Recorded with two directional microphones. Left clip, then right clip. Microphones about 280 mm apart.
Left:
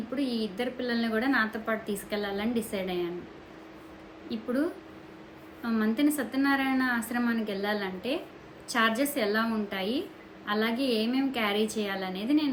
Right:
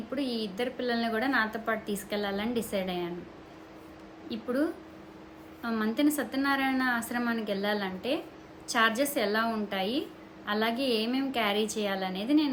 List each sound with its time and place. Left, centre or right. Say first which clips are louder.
0.2 s a woman's voice: left 1 dB; centre
4.3 s a woman's voice: even; centre